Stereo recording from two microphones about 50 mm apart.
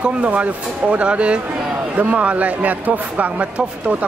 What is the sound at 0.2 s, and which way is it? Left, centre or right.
Speech, right.